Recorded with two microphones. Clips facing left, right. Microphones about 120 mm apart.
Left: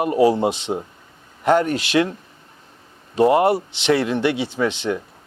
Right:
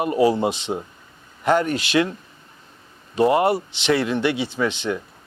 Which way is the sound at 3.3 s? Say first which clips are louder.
Left 2 dB; 50° left (ahead or behind).